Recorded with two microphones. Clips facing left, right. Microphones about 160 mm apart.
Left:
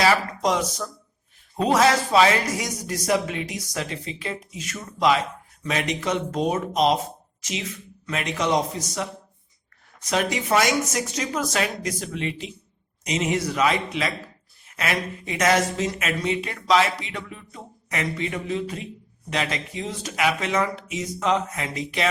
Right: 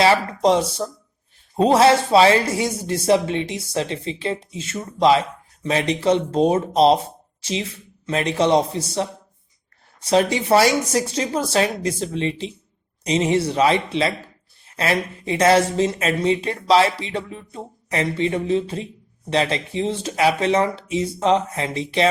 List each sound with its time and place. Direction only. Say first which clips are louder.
0.0 s speech: right 4 dB; 30° right (ahead or behind)